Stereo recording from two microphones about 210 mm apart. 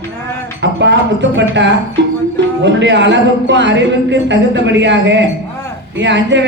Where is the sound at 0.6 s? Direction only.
60° right (ahead or behind).